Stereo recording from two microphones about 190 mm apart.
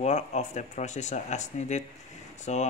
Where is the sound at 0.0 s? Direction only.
40° left (ahead or behind).